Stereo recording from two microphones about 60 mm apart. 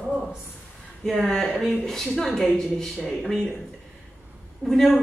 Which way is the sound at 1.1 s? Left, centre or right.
Centre.